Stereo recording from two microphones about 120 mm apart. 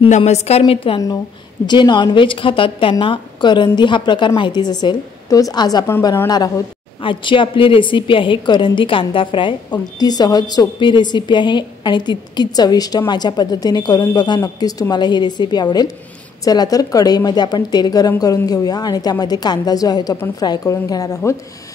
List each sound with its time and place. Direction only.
0.1 s a woman's voice: 65° left (ahead or behind)
1.7 s a woman's voice: 40° left (ahead or behind)
7.0 s a woman's voice: 45° left (ahead or behind); by 21.4 s 25° left (ahead or behind)